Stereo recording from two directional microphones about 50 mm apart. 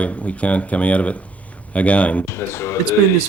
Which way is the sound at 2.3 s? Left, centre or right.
Left.